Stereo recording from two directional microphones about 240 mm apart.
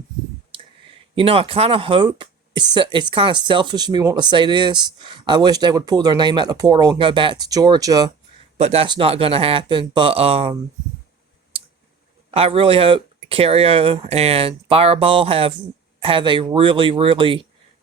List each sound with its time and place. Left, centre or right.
0.5 s a sound: right
1.1 s speech: right
8.5 s speech: right
12.3 s speech: right